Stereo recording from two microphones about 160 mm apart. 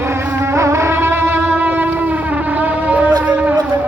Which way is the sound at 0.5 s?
15° right (ahead or behind).